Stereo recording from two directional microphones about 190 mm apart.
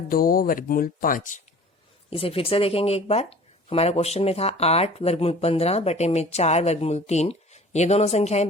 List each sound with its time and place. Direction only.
0.1 s speech: 50° left (ahead or behind)
2.0 s speech: 30° left (ahead or behind)